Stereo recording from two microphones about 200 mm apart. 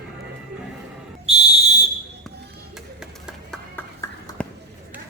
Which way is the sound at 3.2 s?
Centre (ahead or behind).